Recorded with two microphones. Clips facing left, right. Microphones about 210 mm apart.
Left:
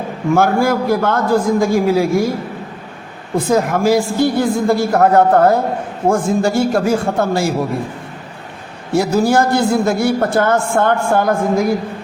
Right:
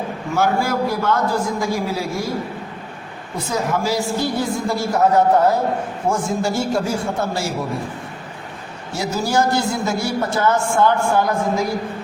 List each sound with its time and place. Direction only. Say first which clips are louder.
0.3 s a man's voice: left 4 dB; 50° left (ahead or behind)
3.3 s a man's voice: left 7 dB; 55° left (ahead or behind)
8.9 s a man's voice: left 8 dB; 55° left (ahead or behind)